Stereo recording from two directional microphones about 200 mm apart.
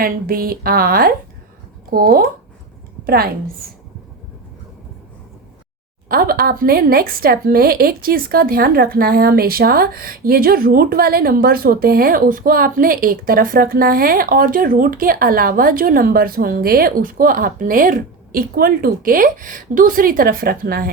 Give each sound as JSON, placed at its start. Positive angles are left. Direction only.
{"t": 0.0, "sound": "a woman's voice", "side_deg": -45}
{"t": 6.1, "sound": "a woman's voice", "side_deg": -45}